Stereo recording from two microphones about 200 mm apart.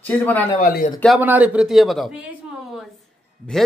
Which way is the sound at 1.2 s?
10° right (ahead or behind).